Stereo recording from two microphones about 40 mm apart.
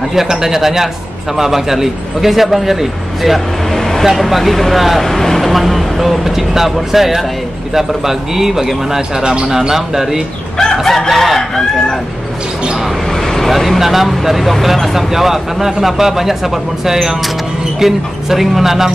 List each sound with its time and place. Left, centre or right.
0.1 s a man's voice: centre
3.7 s vehicle: centre
4.0 s speech: centre
5.0 s a man's voice: centre
9.2 s speech: right
9.5 s a man's voice: centre
10.8 s chicken: centre
13.1 s vehicle: centre
13.5 s a man's voice: centre